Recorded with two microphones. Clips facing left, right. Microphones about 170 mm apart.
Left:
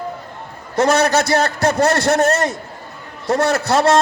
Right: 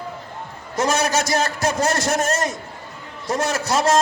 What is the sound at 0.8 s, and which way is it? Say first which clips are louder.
A man's voice: left 5 dB; 65° left (ahead or behind).